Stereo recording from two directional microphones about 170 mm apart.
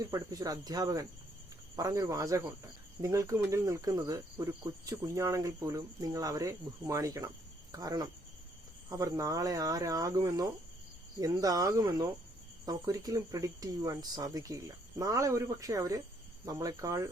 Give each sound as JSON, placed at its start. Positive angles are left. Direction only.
{"t": 0.0, "sound": "cricket", "side_deg": -20}